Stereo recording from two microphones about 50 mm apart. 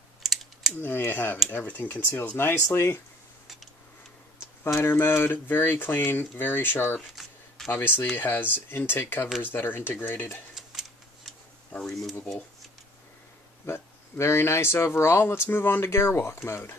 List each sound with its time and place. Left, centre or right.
0.2 s typing: centre
0.7 s speech: left
4.7 s speech: left
7.6 s a sound: centre
8.2 s speech: left
10.5 s a sound: centre
11.8 s speech: centre
13.7 s speech: left
15.8 s speech: left